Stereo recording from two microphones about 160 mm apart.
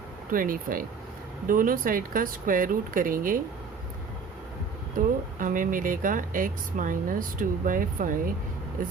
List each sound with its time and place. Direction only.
0.3 s speech: 60° right (ahead or behind)
4.9 s speech: 60° right (ahead or behind)